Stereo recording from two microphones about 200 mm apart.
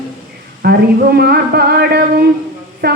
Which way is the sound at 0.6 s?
50° right (ahead or behind).